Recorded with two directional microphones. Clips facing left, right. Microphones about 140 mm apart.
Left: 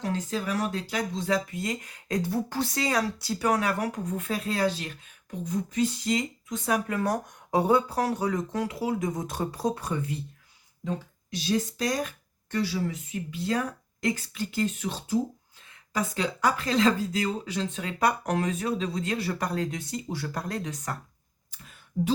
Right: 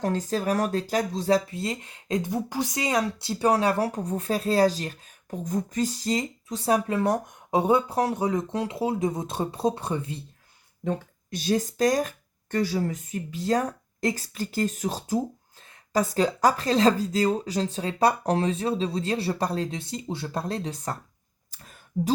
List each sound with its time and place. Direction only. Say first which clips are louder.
0.0 s speech: right 4 dB; 40° right (ahead or behind); by 10.2 s 25° right (ahead or behind)
10.8 s speech: right 4 dB; 50° right (ahead or behind); by 20.9 s 30° right (ahead or behind)
21.5 s a sound: right 2 dB; 40° right (ahead or behind)